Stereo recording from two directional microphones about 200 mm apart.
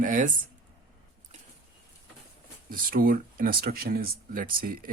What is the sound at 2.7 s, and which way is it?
Speech, 45° right (ahead or behind).